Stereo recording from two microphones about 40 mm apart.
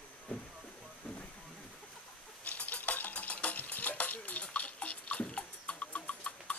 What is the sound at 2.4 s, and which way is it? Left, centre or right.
Stir, left.